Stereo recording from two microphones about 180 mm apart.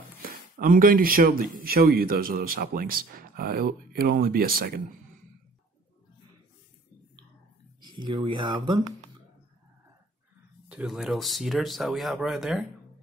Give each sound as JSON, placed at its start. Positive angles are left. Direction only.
{"t": 0.2, "sound": "speech", "side_deg": -50}
{"t": 7.8, "sound": "speech", "side_deg": -25}
{"t": 10.7, "sound": "speech", "side_deg": -5}